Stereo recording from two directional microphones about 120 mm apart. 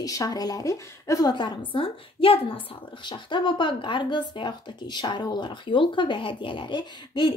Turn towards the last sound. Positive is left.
turn(degrees=40)  # may be behind; listen again after turning